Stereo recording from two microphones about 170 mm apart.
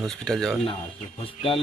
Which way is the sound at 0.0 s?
Centre (ahead or behind).